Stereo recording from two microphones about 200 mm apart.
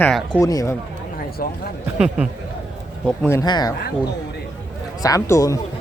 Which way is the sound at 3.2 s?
15° left (ahead or behind).